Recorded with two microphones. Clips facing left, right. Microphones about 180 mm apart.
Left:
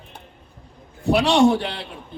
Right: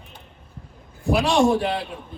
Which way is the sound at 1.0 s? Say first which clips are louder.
Left 2 dB; 65° left (ahead or behind).